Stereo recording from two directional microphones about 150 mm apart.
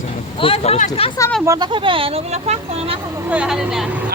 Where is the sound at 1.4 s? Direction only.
20° right (ahead or behind).